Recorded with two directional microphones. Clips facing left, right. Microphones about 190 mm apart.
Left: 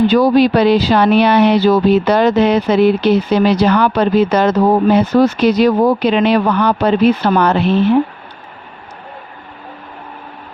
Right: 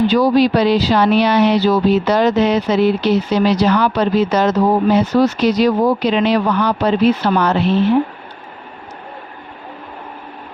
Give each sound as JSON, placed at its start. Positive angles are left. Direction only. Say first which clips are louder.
{"t": 0.1, "sound": "speech", "louder": "left 2 dB", "side_deg": 55}